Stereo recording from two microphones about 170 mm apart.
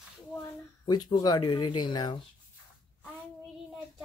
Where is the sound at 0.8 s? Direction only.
25° left (ahead or behind).